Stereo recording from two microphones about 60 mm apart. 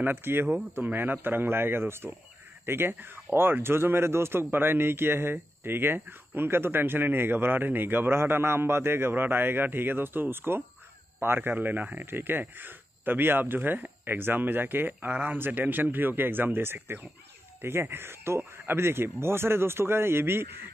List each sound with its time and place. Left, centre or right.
0.0 s speech: right